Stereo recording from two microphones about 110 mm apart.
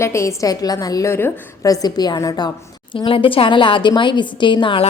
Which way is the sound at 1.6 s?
35° left (ahead or behind).